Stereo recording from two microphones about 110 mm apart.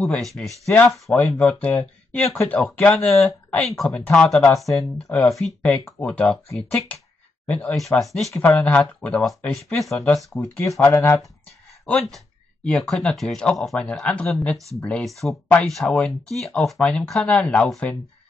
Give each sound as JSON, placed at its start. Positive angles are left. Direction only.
{"t": 0.0, "sound": "speech", "side_deg": 5}
{"t": 8.1, "sound": "speech", "side_deg": 0}
{"t": 8.4, "sound": "speech", "side_deg": 15}
{"t": 9.0, "sound": "speech", "side_deg": 0}
{"t": 10.6, "sound": "speech", "side_deg": 25}
{"t": 11.8, "sound": "speech", "side_deg": 0}